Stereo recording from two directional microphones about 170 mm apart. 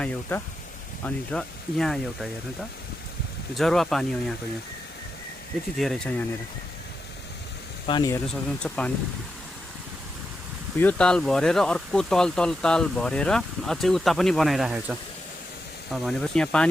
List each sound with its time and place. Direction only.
0.0 s speech: 10° left (ahead or behind)
3.5 s speech: centre (ahead or behind)
5.7 s speech: centre (ahead or behind)
7.9 s speech: 25° left (ahead or behind)
8.3 s speech: 5° left (ahead or behind)
10.8 s speech: 5° left (ahead or behind)